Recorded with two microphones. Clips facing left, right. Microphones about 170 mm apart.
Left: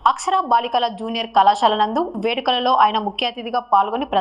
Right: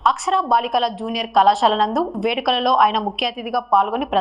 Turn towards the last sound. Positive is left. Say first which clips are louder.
# even
turn(degrees=0)  # may be behind; listen again after turning